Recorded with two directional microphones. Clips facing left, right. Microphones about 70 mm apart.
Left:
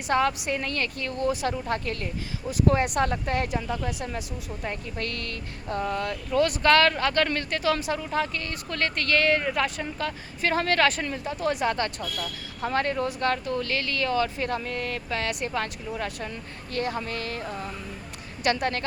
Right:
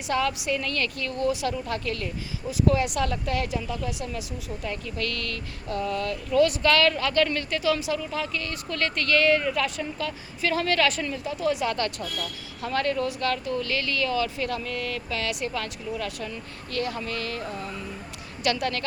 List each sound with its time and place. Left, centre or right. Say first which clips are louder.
0.1 s speech: left 2 dB; left
11.7 s speech: even; left